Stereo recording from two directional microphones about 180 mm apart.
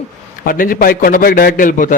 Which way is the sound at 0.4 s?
50° left (ahead or behind).